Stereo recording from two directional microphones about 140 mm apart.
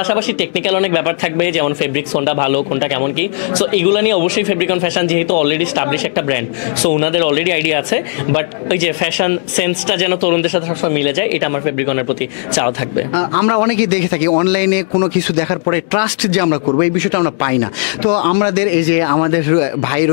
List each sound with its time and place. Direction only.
0.1 s speech: 10° left (ahead or behind)
13.1 s speech: 15° left (ahead or behind)